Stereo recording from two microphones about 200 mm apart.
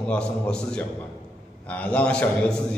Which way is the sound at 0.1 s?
5° left (ahead or behind).